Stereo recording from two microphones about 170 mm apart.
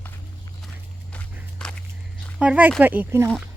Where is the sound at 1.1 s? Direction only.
10° left (ahead or behind).